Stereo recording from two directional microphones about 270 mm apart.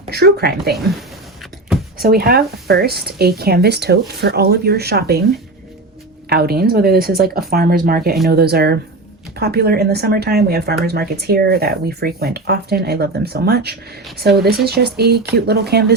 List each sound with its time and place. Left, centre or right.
0.1 s speech: right
2.0 s speech: right
6.2 s speech: right